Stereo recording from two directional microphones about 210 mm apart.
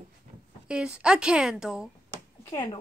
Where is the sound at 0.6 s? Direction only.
5° right (ahead or behind).